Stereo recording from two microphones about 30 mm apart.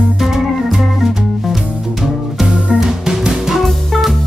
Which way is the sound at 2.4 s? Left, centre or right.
Right.